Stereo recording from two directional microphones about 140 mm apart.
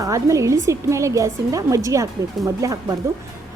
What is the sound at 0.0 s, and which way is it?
A woman's voice, 20° right (ahead or behind).